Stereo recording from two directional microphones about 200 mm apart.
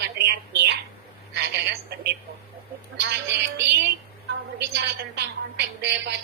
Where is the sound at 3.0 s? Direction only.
60° right (ahead or behind).